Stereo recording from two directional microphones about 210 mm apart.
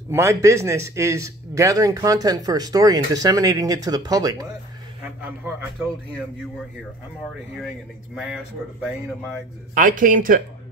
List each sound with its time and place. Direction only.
0.1 s a man's voice: 15° right (ahead or behind)
5.2 s a man's voice: 5° right (ahead or behind)
8.1 s a man's voice: 5° right (ahead or behind)
9.8 s speech: 40° right (ahead or behind)